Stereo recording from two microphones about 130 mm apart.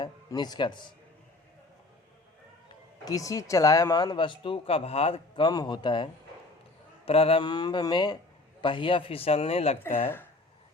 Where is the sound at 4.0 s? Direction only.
40° left (ahead or behind).